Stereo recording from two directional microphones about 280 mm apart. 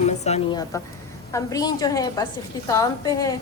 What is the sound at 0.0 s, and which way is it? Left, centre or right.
A woman's voice, left.